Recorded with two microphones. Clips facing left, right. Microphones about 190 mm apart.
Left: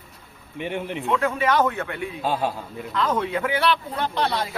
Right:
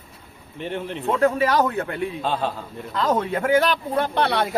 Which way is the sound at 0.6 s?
15° left (ahead or behind).